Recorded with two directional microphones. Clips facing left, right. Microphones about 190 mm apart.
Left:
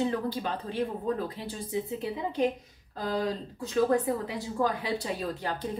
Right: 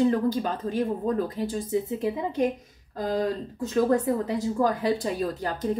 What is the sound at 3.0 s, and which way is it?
Speech, 45° right (ahead or behind).